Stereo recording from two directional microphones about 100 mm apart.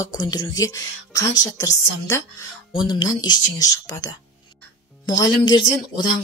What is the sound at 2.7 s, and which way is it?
Speech, 50° left (ahead or behind).